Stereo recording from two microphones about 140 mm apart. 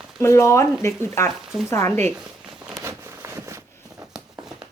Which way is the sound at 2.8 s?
20° right (ahead or behind).